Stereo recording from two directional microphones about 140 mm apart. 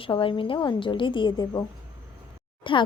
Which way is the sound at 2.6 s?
35° left (ahead or behind).